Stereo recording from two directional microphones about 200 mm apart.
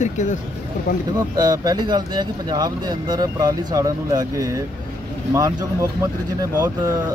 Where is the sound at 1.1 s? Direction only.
20° right (ahead or behind).